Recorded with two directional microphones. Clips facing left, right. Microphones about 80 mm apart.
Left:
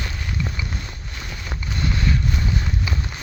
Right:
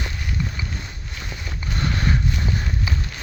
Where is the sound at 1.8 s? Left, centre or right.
Right.